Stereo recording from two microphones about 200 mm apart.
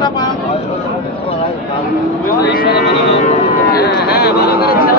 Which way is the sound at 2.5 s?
55° left (ahead or behind).